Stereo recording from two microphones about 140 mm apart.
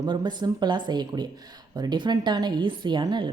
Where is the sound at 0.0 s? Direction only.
30° right (ahead or behind).